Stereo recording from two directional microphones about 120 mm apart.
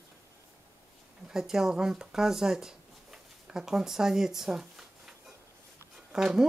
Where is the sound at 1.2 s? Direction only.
5° right (ahead or behind).